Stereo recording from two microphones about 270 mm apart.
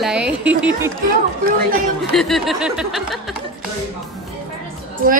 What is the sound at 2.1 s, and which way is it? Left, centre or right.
Speech, centre.